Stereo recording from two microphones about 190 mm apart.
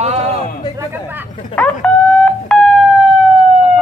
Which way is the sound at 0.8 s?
10° right (ahead or behind).